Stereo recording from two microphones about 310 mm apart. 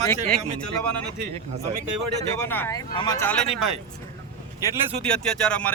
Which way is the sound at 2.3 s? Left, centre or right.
Centre.